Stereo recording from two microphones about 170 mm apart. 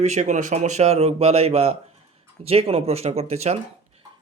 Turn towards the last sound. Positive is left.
turn(degrees=-40)  # may be behind; listen again after turning